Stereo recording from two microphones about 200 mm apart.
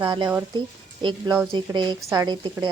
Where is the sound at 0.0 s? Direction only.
15° right (ahead or behind).